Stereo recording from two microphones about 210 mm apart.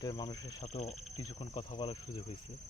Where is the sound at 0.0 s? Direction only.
20° left (ahead or behind).